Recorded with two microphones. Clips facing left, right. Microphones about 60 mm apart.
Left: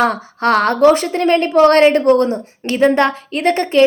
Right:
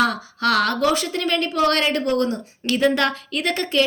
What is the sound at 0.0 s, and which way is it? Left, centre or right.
A woman's voice, left.